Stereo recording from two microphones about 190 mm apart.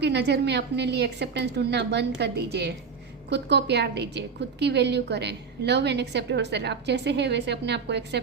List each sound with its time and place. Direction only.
0.0 s a woman's voice: 65° right (ahead or behind)